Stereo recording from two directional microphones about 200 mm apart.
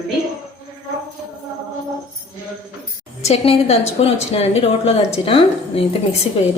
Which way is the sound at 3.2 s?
30° left (ahead or behind).